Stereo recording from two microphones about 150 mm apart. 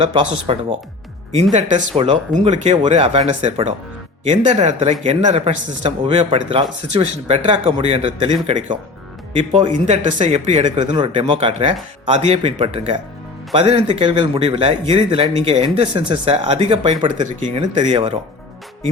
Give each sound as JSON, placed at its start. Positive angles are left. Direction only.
{"t": 0.0, "sound": "speech", "side_deg": -40}
{"t": 1.5, "sound": "speech", "side_deg": -40}
{"t": 9.4, "sound": "speech", "side_deg": -35}
{"t": 9.8, "sound": "speech", "side_deg": -45}
{"t": 10.9, "sound": "speech", "side_deg": -35}